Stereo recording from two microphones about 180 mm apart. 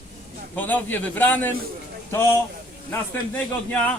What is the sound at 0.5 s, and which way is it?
Speech, 10° left (ahead or behind).